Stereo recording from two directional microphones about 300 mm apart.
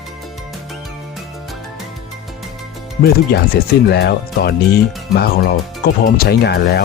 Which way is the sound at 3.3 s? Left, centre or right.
Left.